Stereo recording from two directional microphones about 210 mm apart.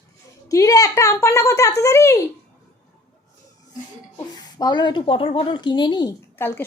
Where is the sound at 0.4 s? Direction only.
15° left (ahead or behind).